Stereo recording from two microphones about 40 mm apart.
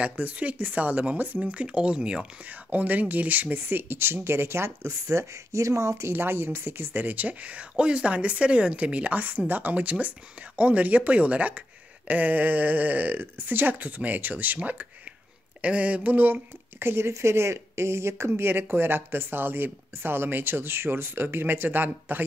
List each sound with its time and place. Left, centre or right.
0.1 s speech: right
1.4 s speech: right
2.7 s speech: right
3.5 s speech: right
6.1 s speech: right
7.0 s speech: right
16.8 s speech: right
21.6 s speech: right